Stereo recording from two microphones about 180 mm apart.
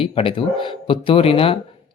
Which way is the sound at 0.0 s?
30° left (ahead or behind).